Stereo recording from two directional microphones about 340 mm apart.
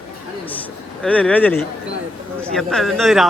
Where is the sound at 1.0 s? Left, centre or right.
Centre.